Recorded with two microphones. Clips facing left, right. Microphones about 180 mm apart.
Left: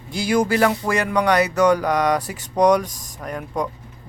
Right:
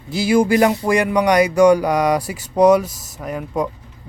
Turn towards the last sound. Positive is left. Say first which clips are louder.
# right 3 dB
turn(degrees=-5)  # may be behind; listen again after turning